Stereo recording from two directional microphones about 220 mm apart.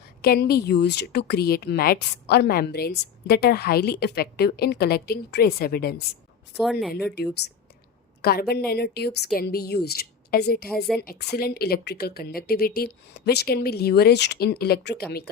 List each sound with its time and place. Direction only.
0.2 s a woman's voice: 45° left (ahead or behind)
6.6 s speech: centre (ahead or behind)
8.2 s a woman's voice: 45° left (ahead or behind)